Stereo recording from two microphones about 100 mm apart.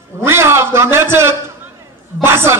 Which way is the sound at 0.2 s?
25° right (ahead or behind).